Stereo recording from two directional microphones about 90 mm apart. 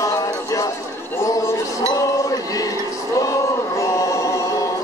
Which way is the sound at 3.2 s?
35° left (ahead or behind).